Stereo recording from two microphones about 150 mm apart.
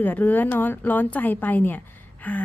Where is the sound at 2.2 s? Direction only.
10° left (ahead or behind).